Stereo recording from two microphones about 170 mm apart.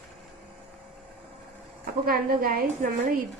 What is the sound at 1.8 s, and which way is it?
Speech, 60° right (ahead or behind).